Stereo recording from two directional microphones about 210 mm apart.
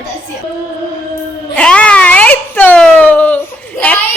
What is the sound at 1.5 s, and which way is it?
Speech, 5° left (ahead or behind).